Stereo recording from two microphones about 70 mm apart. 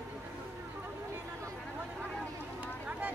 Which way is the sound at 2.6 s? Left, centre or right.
Right.